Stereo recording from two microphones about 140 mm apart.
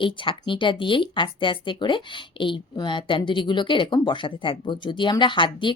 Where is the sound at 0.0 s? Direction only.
35° left (ahead or behind).